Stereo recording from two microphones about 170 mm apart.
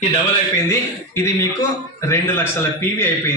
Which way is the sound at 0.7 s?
15° left (ahead or behind).